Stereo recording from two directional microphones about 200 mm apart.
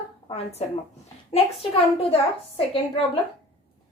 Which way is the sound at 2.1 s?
30° left (ahead or behind).